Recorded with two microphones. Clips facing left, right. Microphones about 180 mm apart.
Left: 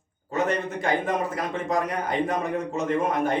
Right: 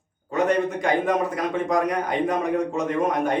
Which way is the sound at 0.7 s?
Centre (ahead or behind).